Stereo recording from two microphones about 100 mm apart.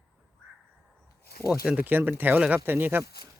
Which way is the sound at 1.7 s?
20° right (ahead or behind).